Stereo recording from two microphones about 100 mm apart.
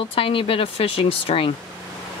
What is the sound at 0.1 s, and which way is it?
Speech, 65° left (ahead or behind).